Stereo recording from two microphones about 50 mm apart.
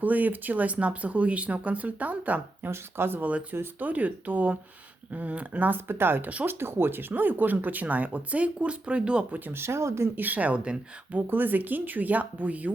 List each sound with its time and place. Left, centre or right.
0.0 s speech: right
2.6 s speech: right
3.2 s speech: right
9.5 s speech: right
10.2 s speech: right
11.1 s speech: right